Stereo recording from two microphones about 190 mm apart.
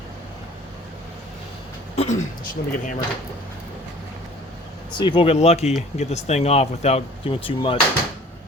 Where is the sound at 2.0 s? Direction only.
40° left (ahead or behind).